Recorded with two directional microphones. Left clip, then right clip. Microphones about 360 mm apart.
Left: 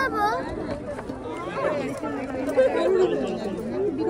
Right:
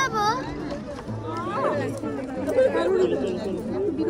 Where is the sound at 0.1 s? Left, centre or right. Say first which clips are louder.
Even; right.